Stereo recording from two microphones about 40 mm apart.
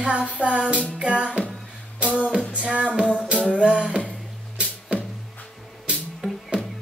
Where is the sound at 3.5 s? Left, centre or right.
Right.